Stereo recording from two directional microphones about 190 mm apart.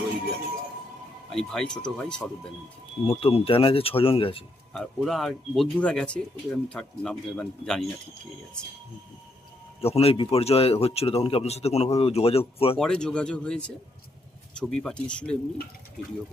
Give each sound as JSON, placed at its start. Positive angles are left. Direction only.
{"t": 1.3, "sound": "speech", "side_deg": 5}
{"t": 3.1, "sound": "speech", "side_deg": 30}
{"t": 4.7, "sound": "speech", "side_deg": 5}
{"t": 9.8, "sound": "a man's voice", "side_deg": 30}
{"t": 12.8, "sound": "speech", "side_deg": 5}